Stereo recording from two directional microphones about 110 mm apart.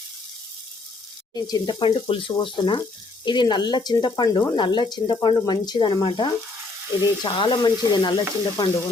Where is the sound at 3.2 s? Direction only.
45° left (ahead or behind).